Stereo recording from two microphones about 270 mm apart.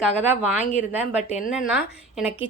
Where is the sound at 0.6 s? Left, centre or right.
Left.